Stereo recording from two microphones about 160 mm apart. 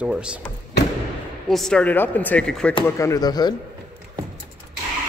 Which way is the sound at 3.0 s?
20° left (ahead or behind).